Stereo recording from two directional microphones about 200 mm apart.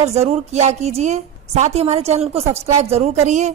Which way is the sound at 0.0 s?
30° right (ahead or behind).